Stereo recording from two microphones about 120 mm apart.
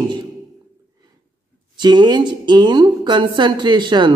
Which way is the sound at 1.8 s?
40° right (ahead or behind).